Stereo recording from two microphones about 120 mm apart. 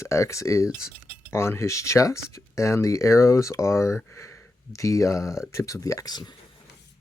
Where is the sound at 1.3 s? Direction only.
20° left (ahead or behind).